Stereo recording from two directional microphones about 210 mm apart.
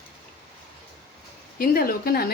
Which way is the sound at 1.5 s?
45° left (ahead or behind).